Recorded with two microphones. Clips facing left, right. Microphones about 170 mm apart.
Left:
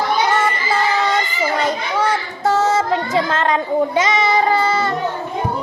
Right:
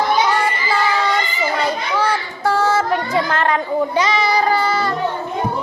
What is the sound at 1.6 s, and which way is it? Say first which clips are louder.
Child singing: even; 20° left (ahead or behind).